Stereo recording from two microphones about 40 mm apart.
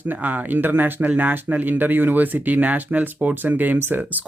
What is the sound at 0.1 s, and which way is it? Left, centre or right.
Speech, right.